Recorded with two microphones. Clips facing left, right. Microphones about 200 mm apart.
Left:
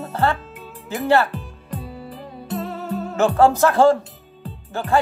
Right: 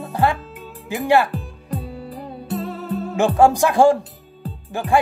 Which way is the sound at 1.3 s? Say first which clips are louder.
Right 4 dB; 45° right (ahead or behind).